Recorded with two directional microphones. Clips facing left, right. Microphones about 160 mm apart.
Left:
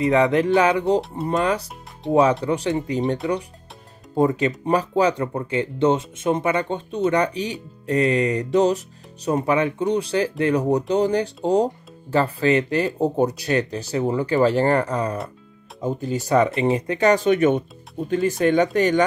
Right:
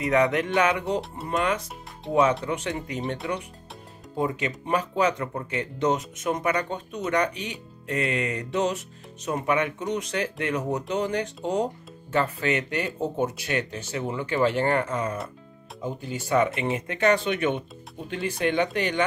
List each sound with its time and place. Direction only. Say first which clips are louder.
0.0 s speech: left 5 dB; 30° left (ahead or behind)
4.2 s speech: left 8 dB; 40° left (ahead or behind)